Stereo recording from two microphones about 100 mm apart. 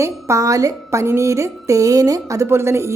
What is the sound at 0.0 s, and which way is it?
A woman's voice, 30° right (ahead or behind).